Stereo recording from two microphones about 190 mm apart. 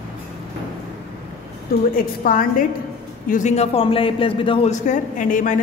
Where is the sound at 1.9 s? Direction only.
45° left (ahead or behind).